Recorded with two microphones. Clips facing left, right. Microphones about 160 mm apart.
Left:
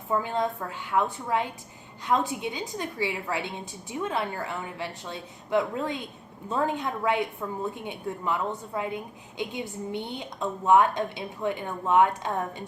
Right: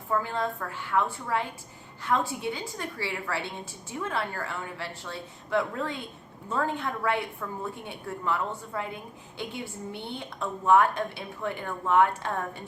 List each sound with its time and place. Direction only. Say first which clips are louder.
0.1 s a woman's voice: left 2 dB; 20° left (ahead or behind)